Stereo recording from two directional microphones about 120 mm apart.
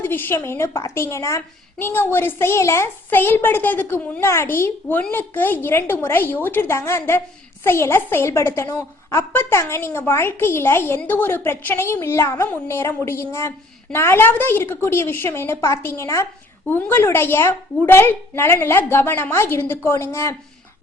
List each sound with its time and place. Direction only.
0.0 s a child's voice: 15° left (ahead or behind)